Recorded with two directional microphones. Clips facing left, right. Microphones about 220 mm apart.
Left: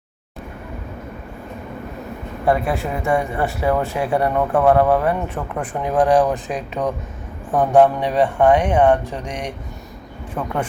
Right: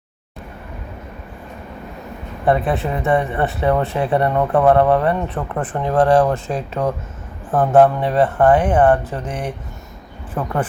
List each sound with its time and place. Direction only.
2.4 s speech: centre (ahead or behind)
5.8 s speech: 15° left (ahead or behind)
7.5 s speech: centre (ahead or behind)